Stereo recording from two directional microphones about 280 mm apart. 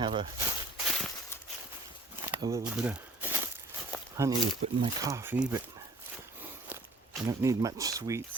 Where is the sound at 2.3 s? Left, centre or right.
Centre.